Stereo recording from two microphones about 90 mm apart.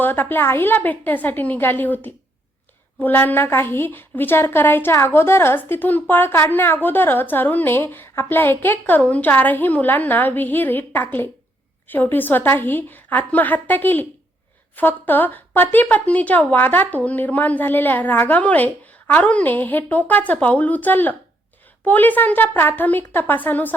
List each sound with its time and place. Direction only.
0.0 s a woman's voice: 25° left (ahead or behind)